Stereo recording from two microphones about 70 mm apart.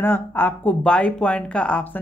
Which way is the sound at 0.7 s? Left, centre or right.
Centre.